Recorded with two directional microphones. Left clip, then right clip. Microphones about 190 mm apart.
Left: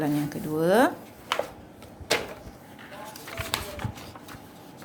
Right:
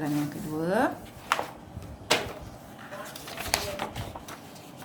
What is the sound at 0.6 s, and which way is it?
Speech, 45° left (ahead or behind).